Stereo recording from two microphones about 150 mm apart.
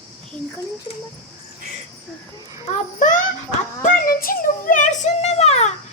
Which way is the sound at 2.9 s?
55° left (ahead or behind).